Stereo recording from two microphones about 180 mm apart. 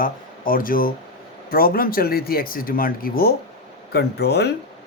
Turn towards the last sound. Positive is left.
turn(degrees=65)  # may be behind; listen again after turning